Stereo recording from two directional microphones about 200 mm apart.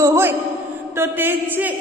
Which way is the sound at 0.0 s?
15° right (ahead or behind).